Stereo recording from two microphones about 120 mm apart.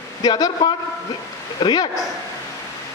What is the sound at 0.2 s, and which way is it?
A man's voice, 30° left (ahead or behind).